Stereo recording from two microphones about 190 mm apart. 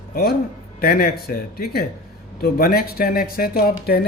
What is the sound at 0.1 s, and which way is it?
Speech, 50° left (ahead or behind).